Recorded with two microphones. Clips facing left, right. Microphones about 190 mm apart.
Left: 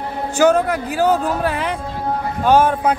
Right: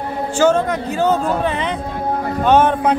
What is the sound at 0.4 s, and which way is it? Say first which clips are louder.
Speech: left 1 dB; 10° left (ahead or behind).